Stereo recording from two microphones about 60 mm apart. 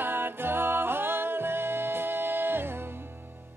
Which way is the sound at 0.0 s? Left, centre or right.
Right.